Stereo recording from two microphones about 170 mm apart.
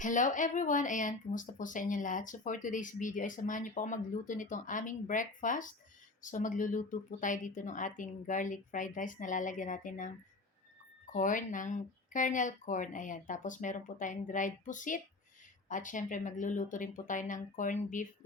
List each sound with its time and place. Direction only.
0.0 s speech: 50° left (ahead or behind)